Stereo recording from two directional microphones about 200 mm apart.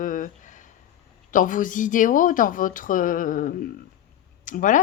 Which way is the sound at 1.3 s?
40° left (ahead or behind).